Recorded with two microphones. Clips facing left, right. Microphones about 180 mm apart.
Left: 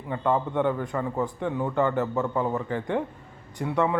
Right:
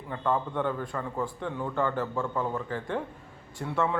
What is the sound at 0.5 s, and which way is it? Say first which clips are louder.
A man's voice: left 5 dB; 20° left (ahead or behind).